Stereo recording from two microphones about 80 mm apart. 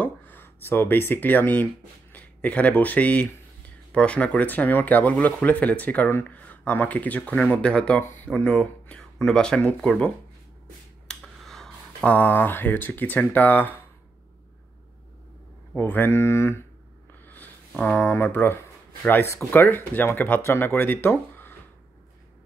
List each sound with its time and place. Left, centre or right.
0.0 s speech: left; by 10.1 s centre
11.1 s a sound: centre
12.0 s speech: left
15.7 s speech: left
17.2 s a sound: left
17.7 s speech: centre